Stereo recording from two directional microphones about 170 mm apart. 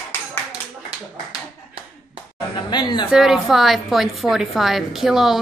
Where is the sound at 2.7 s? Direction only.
25° left (ahead or behind).